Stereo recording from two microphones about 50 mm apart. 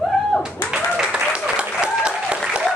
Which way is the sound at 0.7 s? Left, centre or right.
Centre.